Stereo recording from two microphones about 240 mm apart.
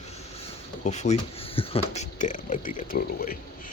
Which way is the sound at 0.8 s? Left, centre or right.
Left.